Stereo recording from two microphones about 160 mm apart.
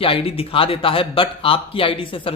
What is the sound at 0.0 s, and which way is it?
A man's voice, 35° left (ahead or behind).